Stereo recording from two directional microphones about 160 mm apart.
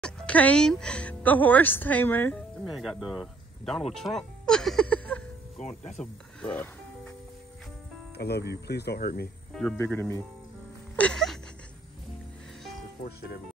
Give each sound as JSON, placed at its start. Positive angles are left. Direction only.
{"t": 0.0, "sound": "speech", "side_deg": 10}
{"t": 2.6, "sound": "speech", "side_deg": 0}
{"t": 5.6, "sound": "speech", "side_deg": 45}
{"t": 5.9, "sound": "speech", "side_deg": 10}
{"t": 8.2, "sound": "speech", "side_deg": 90}
{"t": 9.5, "sound": "speech", "side_deg": 5}
{"t": 9.8, "sound": "speech", "side_deg": 15}
{"t": 11.0, "sound": "music", "side_deg": 5}